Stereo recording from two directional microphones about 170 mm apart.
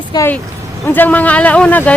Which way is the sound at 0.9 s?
10° left (ahead or behind).